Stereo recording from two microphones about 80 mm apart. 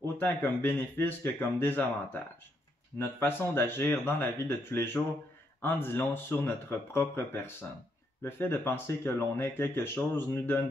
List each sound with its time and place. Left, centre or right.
0.0 s speech: left
3.0 s speech: left